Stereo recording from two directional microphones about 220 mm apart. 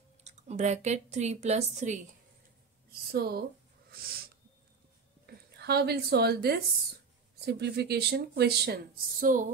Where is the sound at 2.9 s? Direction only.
45° right (ahead or behind).